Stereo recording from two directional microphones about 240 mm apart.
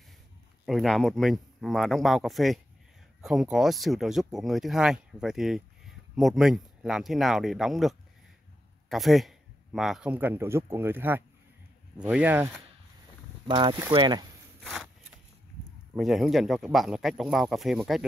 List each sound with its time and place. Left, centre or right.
0.7 s speech: centre
13.5 s speech: centre
14.6 s a sound: centre
15.9 s speech: centre